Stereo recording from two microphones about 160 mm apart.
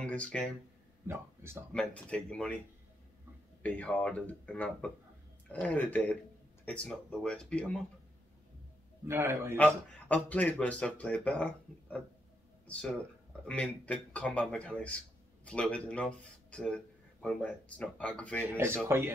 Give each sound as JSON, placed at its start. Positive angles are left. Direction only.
{"t": 0.0, "sound": "a sound", "side_deg": 5}
{"t": 1.0, "sound": "speech", "side_deg": -15}
{"t": 1.7, "sound": "speech", "side_deg": 5}
{"t": 3.6, "sound": "speech", "side_deg": 10}
{"t": 9.0, "sound": "a man's voice", "side_deg": -15}
{"t": 9.9, "sound": "speech", "side_deg": 10}
{"t": 12.6, "sound": "a man's voice", "side_deg": 5}
{"t": 18.9, "sound": "a man's voice", "side_deg": -15}